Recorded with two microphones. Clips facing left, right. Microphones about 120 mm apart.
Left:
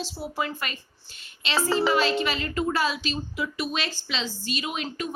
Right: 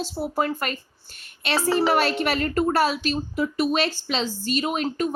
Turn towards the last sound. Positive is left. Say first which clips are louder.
# right 7 dB
turn(degrees=-45)  # may be behind; listen again after turning